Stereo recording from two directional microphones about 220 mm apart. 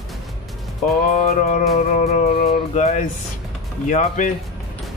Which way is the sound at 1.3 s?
35° left (ahead or behind).